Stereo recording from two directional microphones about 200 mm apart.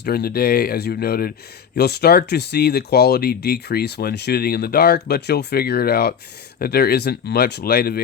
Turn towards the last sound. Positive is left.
turn(degrees=50)  # may be behind; listen again after turning